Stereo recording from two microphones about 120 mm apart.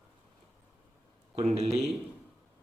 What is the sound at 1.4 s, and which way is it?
Speech, 60° right (ahead or behind).